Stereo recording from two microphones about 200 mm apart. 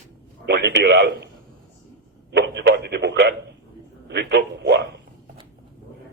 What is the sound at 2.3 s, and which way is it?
A man's voice, 55° right (ahead or behind).